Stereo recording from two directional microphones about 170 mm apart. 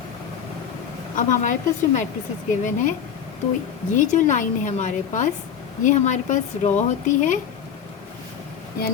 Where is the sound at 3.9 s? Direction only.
50° left (ahead or behind).